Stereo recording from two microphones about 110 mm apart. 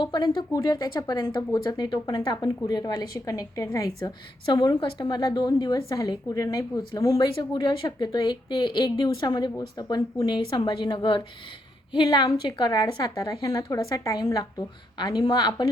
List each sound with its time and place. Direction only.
0.0 s a woman's voice: 40° left (ahead or behind)
14.9 s speech: 40° left (ahead or behind)